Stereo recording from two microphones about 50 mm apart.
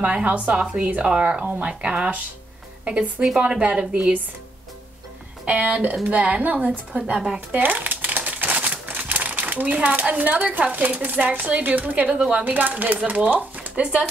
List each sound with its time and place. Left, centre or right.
0.0 s a woman's voice: right
5.4 s a woman's voice: right
7.3 s typewriter: right
11.0 s speech: right
11.2 s speech: right